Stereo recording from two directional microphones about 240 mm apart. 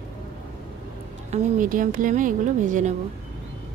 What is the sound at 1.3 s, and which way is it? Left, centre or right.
A woman's voice, right.